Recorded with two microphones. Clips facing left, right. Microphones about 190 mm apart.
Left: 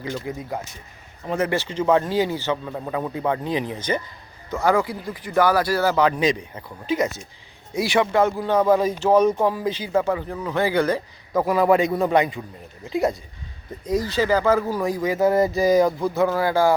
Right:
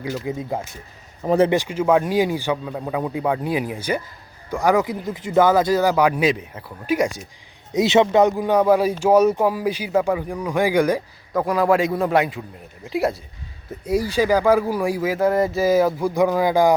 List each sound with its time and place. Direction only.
0.3 s speech: 25° right (ahead or behind)
1.2 s speech: 40° right (ahead or behind)
1.5 s speech: 10° right (ahead or behind)
7.7 s speech: 20° right (ahead or behind)
11.3 s a man's voice: centre (ahead or behind); by 16.7 s 15° right (ahead or behind)